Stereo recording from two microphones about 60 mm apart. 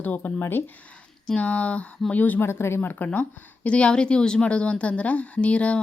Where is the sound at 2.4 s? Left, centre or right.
Left.